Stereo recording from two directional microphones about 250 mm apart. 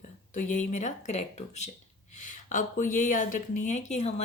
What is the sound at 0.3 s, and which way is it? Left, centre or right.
A woman's voice, left.